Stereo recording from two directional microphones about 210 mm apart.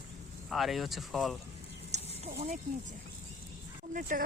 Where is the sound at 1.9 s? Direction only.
30° right (ahead or behind).